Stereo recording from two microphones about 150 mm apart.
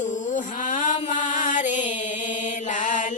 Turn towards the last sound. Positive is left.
turn(degrees=55)  # may be behind; listen again after turning